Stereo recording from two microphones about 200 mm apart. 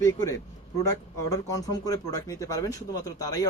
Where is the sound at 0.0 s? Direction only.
15° left (ahead or behind).